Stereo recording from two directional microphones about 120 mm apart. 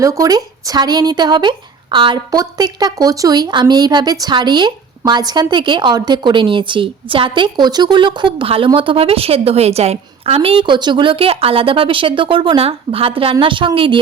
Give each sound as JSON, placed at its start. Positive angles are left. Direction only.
{"t": 0.0, "sound": "a woman's voice", "side_deg": -30}